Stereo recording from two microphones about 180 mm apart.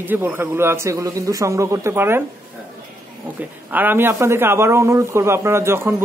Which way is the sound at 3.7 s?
10° right (ahead or behind).